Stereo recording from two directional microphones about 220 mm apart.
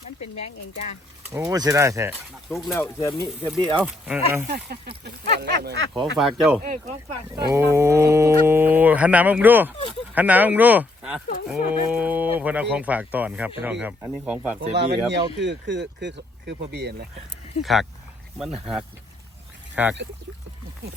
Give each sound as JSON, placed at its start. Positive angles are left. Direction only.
{"t": 1.3, "sound": "speech", "side_deg": -10}
{"t": 2.5, "sound": "speech", "side_deg": 0}
{"t": 2.7, "sound": "speech", "side_deg": 15}
{"t": 3.8, "sound": "speech", "side_deg": -5}
{"t": 4.4, "sound": "speech", "side_deg": -45}
{"t": 5.9, "sound": "speech", "side_deg": 0}
{"t": 7.3, "sound": "speech", "side_deg": -15}
{"t": 14.8, "sound": "speech", "side_deg": -50}
{"t": 17.6, "sound": "speech", "side_deg": 0}